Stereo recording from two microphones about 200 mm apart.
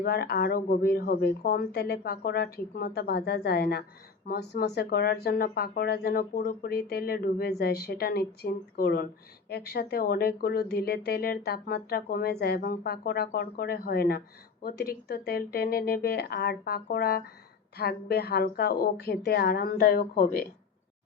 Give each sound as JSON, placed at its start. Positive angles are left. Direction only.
{"t": 0.0, "sound": "speech", "side_deg": 50}